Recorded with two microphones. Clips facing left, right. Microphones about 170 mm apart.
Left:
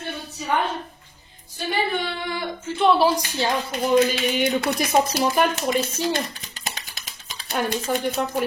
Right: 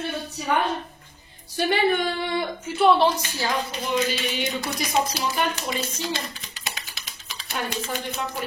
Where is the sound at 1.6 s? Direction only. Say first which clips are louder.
Right 4 dB; 70° right (ahead or behind).